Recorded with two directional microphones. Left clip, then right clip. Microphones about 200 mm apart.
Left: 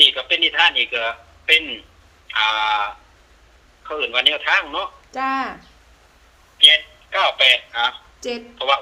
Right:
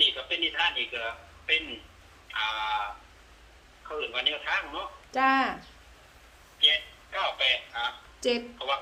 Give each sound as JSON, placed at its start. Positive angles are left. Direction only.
{"t": 0.0, "sound": "a sound", "side_deg": 55}
{"t": 2.2, "sound": "a man's voice", "side_deg": 55}
{"t": 5.1, "sound": "speech", "side_deg": 15}
{"t": 6.6, "sound": "a man's voice", "side_deg": 55}
{"t": 8.2, "sound": "a woman's voice", "side_deg": 5}
{"t": 8.5, "sound": "a man's voice", "side_deg": 55}